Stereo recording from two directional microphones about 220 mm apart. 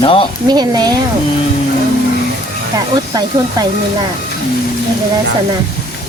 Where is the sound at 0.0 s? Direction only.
25° left (ahead or behind).